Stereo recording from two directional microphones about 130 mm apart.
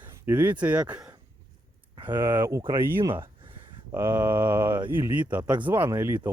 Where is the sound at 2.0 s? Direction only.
20° right (ahead or behind).